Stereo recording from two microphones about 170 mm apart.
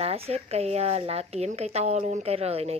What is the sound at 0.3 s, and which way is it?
Speech, 40° right (ahead or behind).